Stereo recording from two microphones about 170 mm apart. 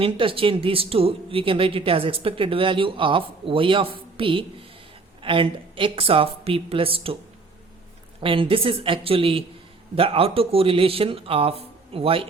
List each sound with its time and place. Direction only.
0.0 s speech: 30° right (ahead or behind)
8.2 s speech: 30° right (ahead or behind)